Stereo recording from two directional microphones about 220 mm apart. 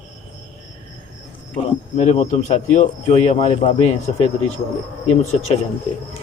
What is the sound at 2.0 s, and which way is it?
A man's voice, 30° left (ahead or behind).